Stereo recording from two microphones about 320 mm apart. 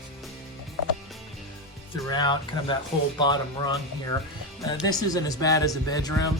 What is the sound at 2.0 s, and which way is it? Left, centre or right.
Speech, centre.